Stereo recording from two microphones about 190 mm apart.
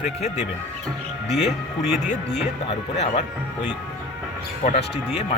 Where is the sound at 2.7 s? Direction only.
35° left (ahead or behind).